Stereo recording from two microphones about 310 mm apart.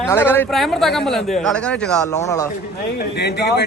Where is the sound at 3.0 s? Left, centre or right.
Left.